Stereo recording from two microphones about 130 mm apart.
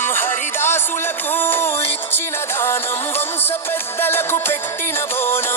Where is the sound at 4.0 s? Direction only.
20° left (ahead or behind).